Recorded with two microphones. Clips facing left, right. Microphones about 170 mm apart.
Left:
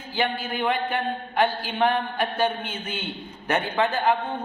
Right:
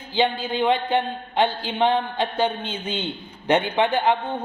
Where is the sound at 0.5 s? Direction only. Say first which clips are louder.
Right 6 dB; 20° right (ahead or behind).